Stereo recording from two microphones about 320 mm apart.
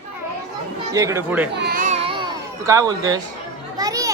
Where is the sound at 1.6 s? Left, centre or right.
Right; by 3.2 s centre.